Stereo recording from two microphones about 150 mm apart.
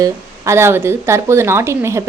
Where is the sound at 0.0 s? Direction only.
20° right (ahead or behind).